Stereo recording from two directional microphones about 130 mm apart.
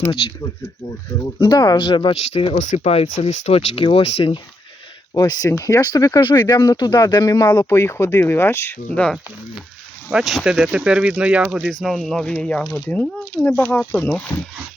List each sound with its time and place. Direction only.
1.4 s speech: 30° left (ahead or behind)
2.6 s speech: 75° left (ahead or behind)
2.8 s speech: 50° left (ahead or behind)
5.1 s speech: 30° left (ahead or behind)
7.7 s speech: 20° left (ahead or behind)
10.1 s speech: 5° right (ahead or behind)
11.7 s speech: centre (ahead or behind)